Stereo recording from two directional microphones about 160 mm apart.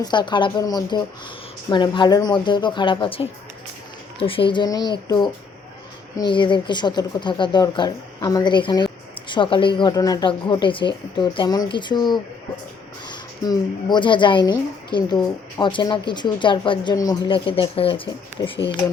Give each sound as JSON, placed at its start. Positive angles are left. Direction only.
{"t": 0.0, "sound": "speech", "side_deg": 30}